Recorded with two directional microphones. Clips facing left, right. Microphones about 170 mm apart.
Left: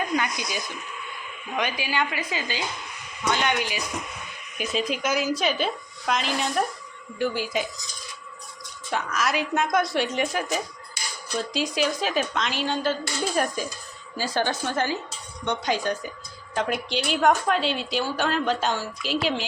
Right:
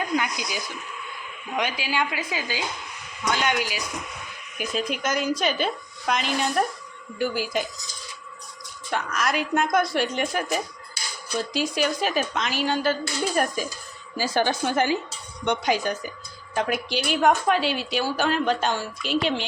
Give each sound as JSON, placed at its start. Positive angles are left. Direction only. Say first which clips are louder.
{"t": 0.2, "sound": "a woman's voice", "louder": "even", "side_deg": -10}
{"t": 4.5, "sound": "a woman's voice", "louder": "left 1 dB", "side_deg": 0}
{"t": 8.9, "sound": "a woman's voice", "louder": "even", "side_deg": 0}